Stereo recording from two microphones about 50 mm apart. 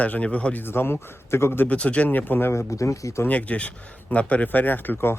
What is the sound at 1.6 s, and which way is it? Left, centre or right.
Speech, left.